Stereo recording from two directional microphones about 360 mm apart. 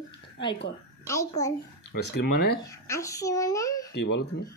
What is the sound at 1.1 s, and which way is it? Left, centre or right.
Speech, centre.